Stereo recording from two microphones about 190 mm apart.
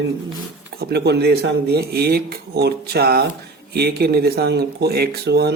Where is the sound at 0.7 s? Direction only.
55° right (ahead or behind).